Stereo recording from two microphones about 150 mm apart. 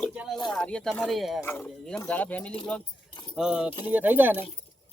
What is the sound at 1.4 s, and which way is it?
Speech, 15° left (ahead or behind).